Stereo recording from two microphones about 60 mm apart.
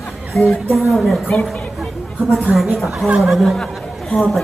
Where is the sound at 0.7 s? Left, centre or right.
Centre.